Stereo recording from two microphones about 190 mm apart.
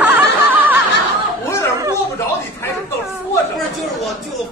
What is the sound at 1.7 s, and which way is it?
Snicker, 15° right (ahead or behind).